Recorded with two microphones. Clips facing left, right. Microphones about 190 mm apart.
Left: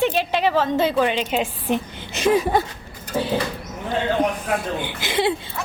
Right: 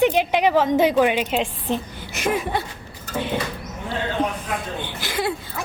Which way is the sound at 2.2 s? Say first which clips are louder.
Left 5 dB; 35° left (ahead or behind).